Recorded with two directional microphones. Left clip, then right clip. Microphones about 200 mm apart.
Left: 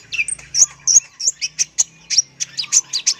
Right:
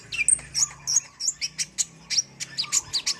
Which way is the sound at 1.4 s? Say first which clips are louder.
Left 9 dB; 5° right (ahead or behind).